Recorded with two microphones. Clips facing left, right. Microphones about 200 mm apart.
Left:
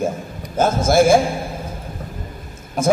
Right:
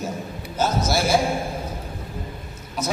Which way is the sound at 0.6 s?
50° left (ahead or behind).